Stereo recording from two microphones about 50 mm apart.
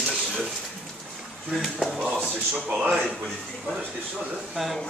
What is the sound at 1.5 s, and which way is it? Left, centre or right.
Speech, centre.